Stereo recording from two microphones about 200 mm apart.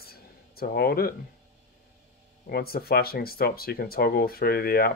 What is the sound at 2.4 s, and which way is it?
Speech, 50° left (ahead or behind).